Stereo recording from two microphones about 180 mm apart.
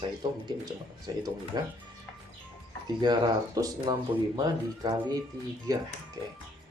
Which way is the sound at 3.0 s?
20° right (ahead or behind).